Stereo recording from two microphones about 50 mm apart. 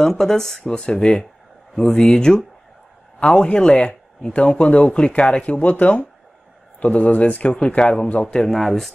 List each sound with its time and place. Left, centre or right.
0.0 s speech: centre
5.4 s speech: left
8.5 s speech: centre